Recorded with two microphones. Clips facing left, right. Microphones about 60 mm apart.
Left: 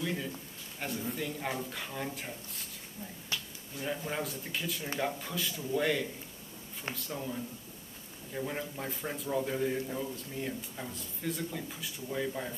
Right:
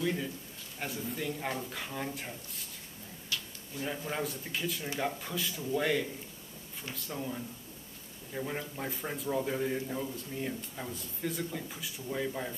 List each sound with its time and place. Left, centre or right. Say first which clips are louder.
0.0 s a man's voice: right 2 dB; centre
3.3 s a sound: even; left
3.8 s a man's voice: even; centre